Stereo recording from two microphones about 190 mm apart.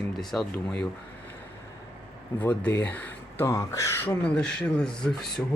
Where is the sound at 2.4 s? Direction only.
10° left (ahead or behind).